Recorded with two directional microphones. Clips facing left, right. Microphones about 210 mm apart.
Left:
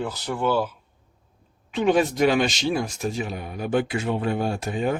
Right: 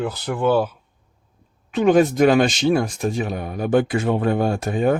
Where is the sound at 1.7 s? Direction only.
45° right (ahead or behind).